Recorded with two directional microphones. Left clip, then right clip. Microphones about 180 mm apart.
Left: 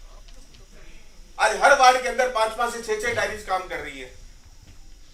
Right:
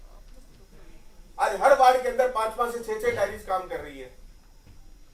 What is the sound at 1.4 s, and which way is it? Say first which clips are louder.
A man's voice: left 3 dB; 25° right (ahead or behind).